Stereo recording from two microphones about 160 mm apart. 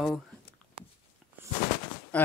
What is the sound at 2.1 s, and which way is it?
Speech, 10° left (ahead or behind).